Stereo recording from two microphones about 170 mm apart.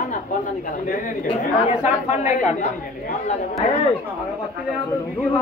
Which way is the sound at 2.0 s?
40° left (ahead or behind).